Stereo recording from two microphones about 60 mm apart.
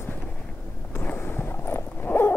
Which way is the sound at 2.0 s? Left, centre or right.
Left.